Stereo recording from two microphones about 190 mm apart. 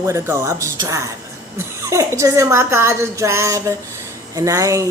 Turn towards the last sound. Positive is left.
turn(degrees=-15)  # may be behind; listen again after turning